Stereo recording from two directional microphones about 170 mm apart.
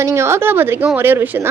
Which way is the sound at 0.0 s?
15° right (ahead or behind).